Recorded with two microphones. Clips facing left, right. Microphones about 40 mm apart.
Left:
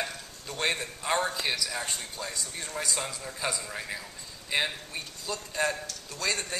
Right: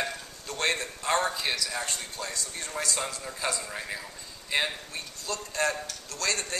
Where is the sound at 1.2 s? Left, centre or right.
Centre.